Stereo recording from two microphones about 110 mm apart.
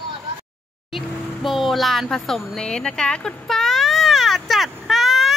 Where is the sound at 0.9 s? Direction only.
Centre (ahead or behind).